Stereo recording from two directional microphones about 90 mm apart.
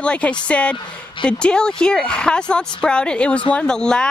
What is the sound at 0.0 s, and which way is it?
Speech, 10° left (ahead or behind).